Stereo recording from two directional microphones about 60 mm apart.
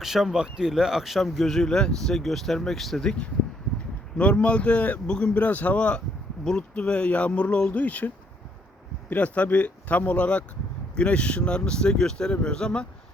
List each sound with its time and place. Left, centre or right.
0.0 s speech: centre